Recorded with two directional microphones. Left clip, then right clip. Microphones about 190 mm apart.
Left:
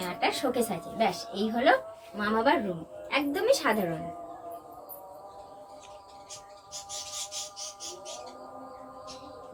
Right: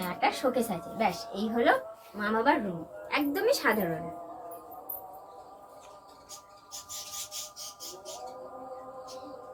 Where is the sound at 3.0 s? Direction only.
50° left (ahead or behind).